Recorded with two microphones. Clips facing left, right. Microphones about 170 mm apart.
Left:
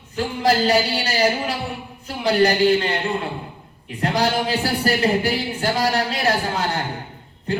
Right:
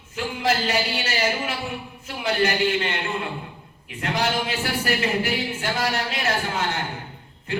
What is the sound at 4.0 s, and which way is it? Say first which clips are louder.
Speech: left 4 dB; 35° left (ahead or behind).